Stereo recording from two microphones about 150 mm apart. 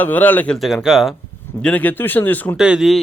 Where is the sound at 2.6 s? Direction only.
5° right (ahead or behind).